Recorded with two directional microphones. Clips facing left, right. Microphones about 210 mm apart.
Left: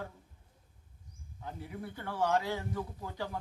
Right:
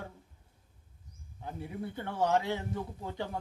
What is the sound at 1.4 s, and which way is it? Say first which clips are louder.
Speech: right 3 dB; 25° right (ahead or behind).